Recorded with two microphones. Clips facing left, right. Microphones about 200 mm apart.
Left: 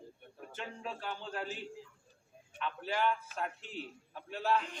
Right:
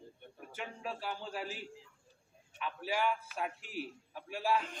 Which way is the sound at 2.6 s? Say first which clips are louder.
Left 1 dB; 10° right (ahead or behind).